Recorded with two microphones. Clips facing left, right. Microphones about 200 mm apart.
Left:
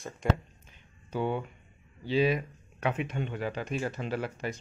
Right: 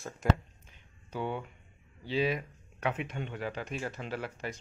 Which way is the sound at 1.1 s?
35° left (ahead or behind).